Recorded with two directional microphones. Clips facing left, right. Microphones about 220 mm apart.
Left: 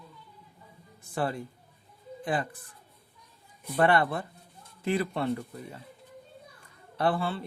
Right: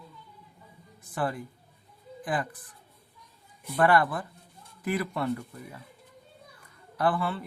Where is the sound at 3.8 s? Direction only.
25° left (ahead or behind).